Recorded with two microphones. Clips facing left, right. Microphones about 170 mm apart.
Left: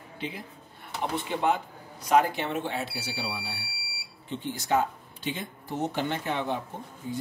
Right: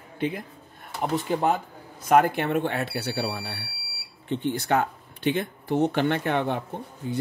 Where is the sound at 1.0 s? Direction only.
40° right (ahead or behind); by 6.6 s 60° right (ahead or behind).